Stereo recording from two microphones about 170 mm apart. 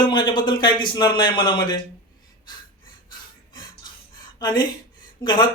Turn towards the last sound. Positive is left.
turn(degrees=25)  # may be behind; listen again after turning